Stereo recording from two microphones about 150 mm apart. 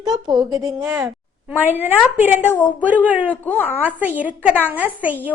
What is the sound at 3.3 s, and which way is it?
Speech, 10° left (ahead or behind).